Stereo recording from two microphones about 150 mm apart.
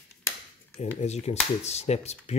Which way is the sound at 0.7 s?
45° left (ahead or behind).